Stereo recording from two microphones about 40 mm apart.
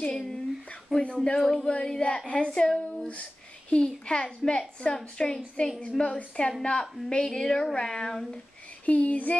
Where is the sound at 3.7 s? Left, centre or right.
Left.